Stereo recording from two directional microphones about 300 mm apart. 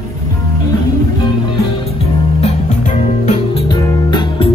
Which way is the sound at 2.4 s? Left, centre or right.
Left.